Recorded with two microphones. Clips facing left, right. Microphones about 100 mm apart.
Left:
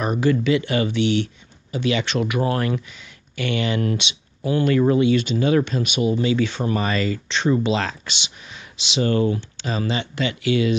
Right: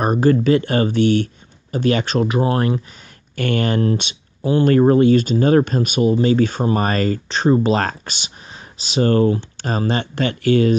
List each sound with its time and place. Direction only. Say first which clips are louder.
0.0 s speech: right 5 dB; 45° right (ahead or behind)
3.3 s speech: right 4 dB; 45° right (ahead or behind)
4.4 s speech: right 4 dB; 25° right (ahead or behind)
4.6 s speech: right 5 dB; 45° right (ahead or behind)